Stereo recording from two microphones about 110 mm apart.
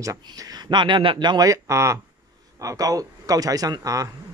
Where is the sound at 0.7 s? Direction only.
45° right (ahead or behind).